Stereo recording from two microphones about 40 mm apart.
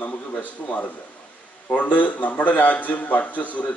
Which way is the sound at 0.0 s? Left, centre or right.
Left.